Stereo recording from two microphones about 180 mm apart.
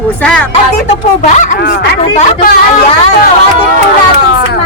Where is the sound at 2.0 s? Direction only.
35° left (ahead or behind).